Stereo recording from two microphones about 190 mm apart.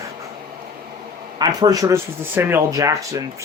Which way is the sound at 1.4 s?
20° right (ahead or behind).